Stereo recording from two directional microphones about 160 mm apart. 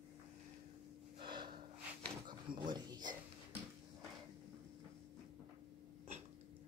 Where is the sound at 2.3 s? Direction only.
25° right (ahead or behind).